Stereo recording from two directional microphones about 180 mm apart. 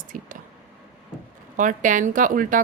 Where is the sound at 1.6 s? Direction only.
45° right (ahead or behind).